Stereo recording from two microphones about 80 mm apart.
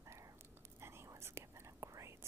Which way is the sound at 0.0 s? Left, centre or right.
Right.